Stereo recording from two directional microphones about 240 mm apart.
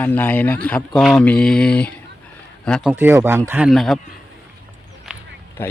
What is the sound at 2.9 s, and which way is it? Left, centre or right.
Speech, centre.